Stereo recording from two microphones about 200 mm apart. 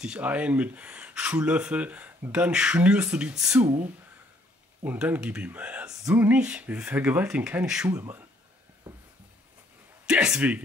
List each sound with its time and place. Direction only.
0.0 s speech: 5° right (ahead or behind)
4.8 s speech: 10° right (ahead or behind)
7.9 s speech: 15° right (ahead or behind)
10.0 s speech: 5° right (ahead or behind)